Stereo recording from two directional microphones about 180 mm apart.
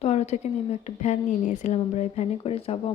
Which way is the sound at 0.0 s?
35° left (ahead or behind).